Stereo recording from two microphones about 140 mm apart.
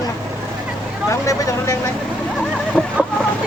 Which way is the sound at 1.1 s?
20° left (ahead or behind).